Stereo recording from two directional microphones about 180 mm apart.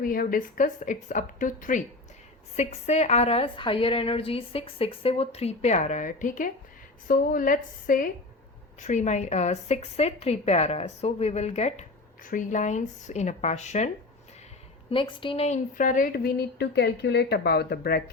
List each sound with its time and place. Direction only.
0.0 s a woman's voice: 50° left (ahead or behind)
14.8 s speech: 30° left (ahead or behind); by 18.0 s 60° left (ahead or behind)